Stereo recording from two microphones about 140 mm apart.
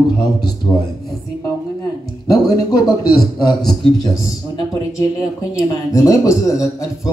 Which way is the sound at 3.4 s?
30° left (ahead or behind).